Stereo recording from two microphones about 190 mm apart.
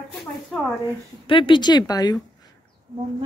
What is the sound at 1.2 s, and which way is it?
Speech, 25° left (ahead or behind).